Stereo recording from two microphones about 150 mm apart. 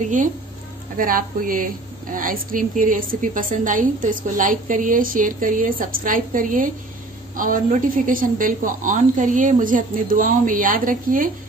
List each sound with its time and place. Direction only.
0.9 s a woman's voice: 70° right (ahead or behind)